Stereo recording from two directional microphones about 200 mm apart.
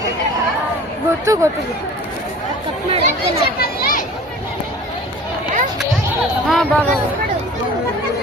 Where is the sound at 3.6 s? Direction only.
45° left (ahead or behind).